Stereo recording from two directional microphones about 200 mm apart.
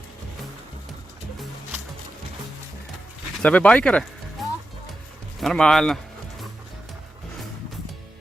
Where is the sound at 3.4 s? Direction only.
5° left (ahead or behind).